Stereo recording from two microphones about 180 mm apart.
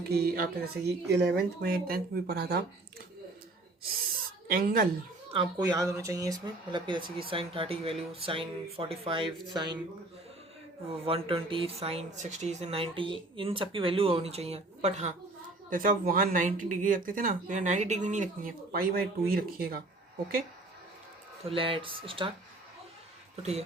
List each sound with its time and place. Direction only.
0.1 s speech: 55° right (ahead or behind)
4.4 s a woman's voice: 50° right (ahead or behind)
5.3 s speech: 25° right (ahead or behind)
10.8 s speech: 30° right (ahead or behind)
15.7 s speech: 50° right (ahead or behind)
18.7 s speech: 55° right (ahead or behind)
21.4 s speech: 30° right (ahead or behind)
23.4 s speech: 35° right (ahead or behind)